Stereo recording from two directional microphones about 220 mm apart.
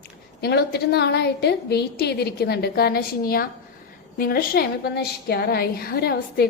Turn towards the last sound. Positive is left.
turn(degrees=45)  # may be behind; listen again after turning